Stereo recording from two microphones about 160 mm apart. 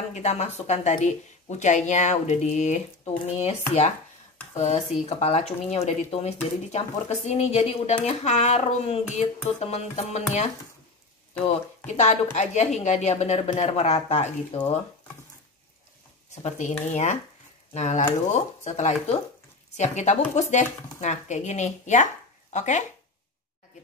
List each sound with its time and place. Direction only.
0.1 s speech: 45° left (ahead or behind)
16.4 s speech: 50° left (ahead or behind)